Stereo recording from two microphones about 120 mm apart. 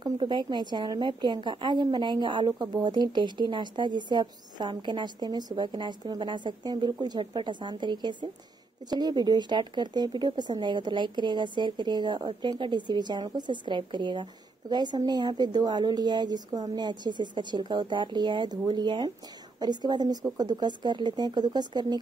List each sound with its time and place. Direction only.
0.0 s speech: 35° right (ahead or behind)